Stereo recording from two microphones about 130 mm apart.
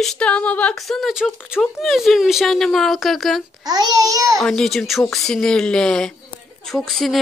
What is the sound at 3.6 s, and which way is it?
Speech, 30° right (ahead or behind).